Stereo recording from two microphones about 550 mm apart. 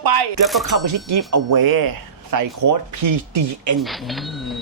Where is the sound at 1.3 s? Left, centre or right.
Right.